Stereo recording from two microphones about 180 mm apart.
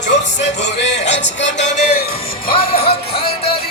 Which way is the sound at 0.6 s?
80° left.